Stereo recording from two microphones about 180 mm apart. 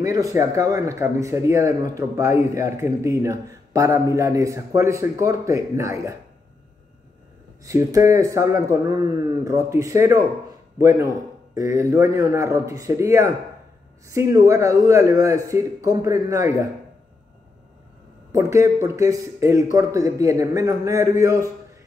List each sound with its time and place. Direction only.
0.0 s speech: 20° right (ahead or behind)
7.6 s speech: 15° right (ahead or behind)
18.3 s speech: 15° right (ahead or behind)